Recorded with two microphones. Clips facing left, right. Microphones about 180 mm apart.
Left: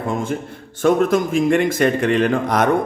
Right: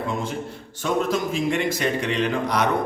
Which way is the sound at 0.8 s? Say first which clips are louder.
Left 7 dB; 55° left (ahead or behind).